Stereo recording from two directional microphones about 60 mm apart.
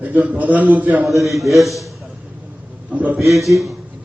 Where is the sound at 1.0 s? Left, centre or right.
Centre.